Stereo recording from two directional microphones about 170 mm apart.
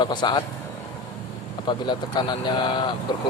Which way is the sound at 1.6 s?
25° left (ahead or behind).